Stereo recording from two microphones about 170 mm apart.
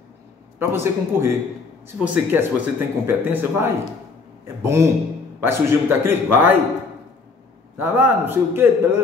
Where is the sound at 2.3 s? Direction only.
10° right (ahead or behind).